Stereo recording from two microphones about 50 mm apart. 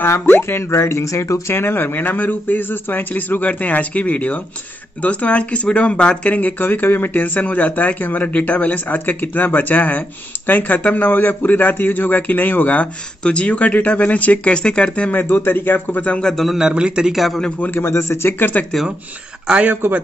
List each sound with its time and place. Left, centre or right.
0.4 s speech: left
1.5 s a man's voice: left
6.6 s a man's voice: left
13.2 s speech: left
15.1 s a man's voice: left
16.0 s speech: left
16.4 s a man's voice: centre
17.1 s a man's voice: centre
17.7 s a man's voice: left
18.7 s speech: centre
19.7 s speech: right